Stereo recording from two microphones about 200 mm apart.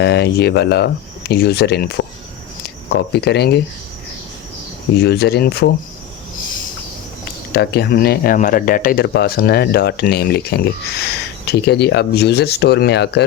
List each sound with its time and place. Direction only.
0.0 s speech: 55° left (ahead or behind)
4.9 s speech: 55° left (ahead or behind)
7.5 s speech: 55° left (ahead or behind)